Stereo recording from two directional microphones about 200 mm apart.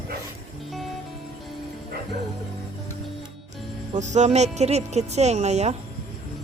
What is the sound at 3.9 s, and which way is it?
Speech, 35° right (ahead or behind).